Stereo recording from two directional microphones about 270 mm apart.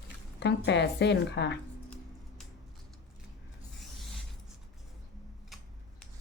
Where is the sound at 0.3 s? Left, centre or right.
Left.